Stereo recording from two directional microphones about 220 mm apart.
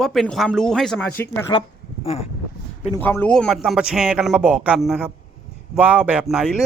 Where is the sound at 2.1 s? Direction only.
25° left (ahead or behind).